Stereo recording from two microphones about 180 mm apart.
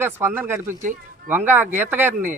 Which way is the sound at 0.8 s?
45° right (ahead or behind).